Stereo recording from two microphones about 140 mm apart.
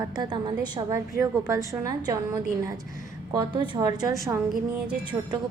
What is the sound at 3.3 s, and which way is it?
Speech, 30° right (ahead or behind).